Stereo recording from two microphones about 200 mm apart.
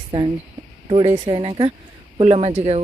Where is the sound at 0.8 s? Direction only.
30° right (ahead or behind).